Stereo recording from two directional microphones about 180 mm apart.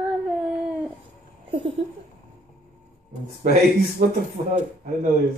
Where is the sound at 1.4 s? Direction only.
30° right (ahead or behind).